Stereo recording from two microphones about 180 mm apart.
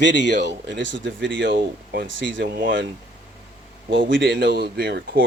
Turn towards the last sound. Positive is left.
turn(degrees=-65)  # may be behind; listen again after turning